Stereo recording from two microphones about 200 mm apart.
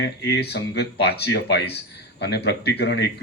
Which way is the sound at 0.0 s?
55° left (ahead or behind).